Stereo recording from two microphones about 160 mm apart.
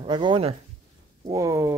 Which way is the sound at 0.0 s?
30° right (ahead or behind).